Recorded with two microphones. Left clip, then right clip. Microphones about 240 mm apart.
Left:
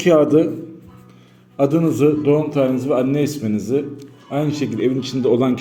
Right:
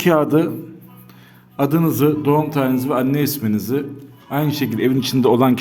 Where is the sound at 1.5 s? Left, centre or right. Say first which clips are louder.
Left 2 dB; right.